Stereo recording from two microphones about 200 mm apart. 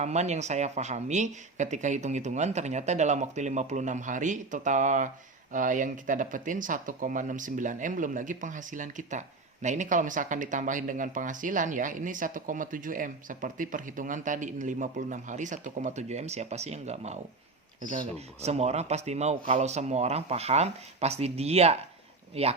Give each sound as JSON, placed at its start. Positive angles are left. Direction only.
{"t": 0.0, "sound": "speech", "side_deg": -35}